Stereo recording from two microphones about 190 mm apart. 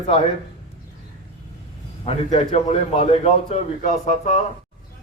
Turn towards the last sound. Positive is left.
turn(degrees=40)  # may be behind; listen again after turning